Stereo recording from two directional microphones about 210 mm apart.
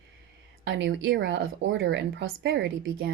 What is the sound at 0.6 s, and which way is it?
A woman's voice, 60° right (ahead or behind).